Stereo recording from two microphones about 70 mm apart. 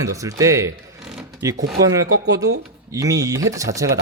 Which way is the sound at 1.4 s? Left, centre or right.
Right.